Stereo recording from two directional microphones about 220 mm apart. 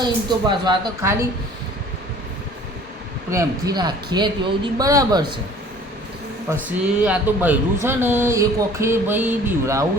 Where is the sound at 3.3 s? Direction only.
15° right (ahead or behind).